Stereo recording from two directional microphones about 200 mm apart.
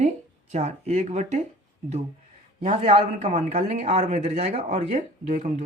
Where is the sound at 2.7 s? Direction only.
35° right (ahead or behind).